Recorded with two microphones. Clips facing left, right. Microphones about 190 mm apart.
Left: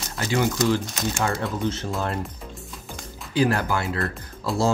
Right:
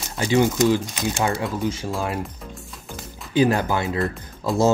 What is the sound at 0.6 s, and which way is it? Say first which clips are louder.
Speech: right 3 dB; 10° right (ahead or behind).